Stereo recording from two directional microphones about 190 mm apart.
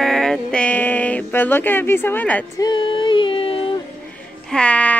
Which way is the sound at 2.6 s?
25° left (ahead or behind).